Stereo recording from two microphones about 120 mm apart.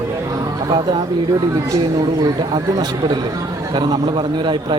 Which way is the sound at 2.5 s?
40° right (ahead or behind).